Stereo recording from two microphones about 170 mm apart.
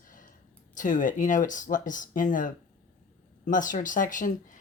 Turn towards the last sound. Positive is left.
turn(degrees=50)  # may be behind; listen again after turning